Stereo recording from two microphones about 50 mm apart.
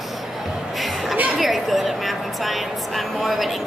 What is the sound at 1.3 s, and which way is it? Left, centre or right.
A woman's voice, centre.